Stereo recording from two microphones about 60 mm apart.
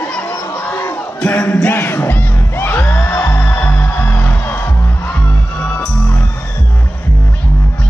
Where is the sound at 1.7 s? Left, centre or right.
Left.